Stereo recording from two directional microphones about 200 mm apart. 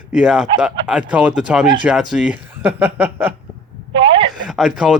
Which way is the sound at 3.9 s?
25° right (ahead or behind).